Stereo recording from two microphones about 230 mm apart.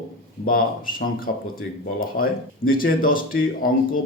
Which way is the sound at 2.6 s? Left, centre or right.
Left.